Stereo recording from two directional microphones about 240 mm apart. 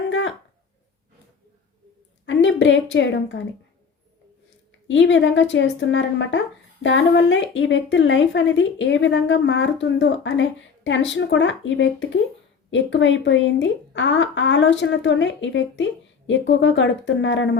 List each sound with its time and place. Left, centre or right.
0.1 s a sound: left
2.2 s a woman's voice: left
4.9 s a woman's voice: left